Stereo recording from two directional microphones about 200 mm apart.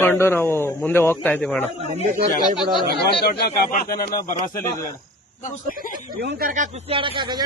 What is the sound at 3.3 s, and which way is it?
Speech, 45° left (ahead or behind).